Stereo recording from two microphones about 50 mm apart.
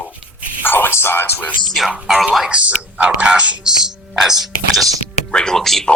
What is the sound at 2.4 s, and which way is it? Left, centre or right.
Speech, right.